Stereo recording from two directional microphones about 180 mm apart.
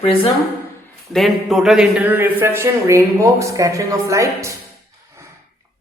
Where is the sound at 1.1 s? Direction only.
Centre (ahead or behind); by 4.5 s 15° right (ahead or behind).